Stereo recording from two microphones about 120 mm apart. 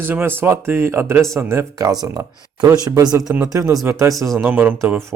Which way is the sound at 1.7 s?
35° right (ahead or behind).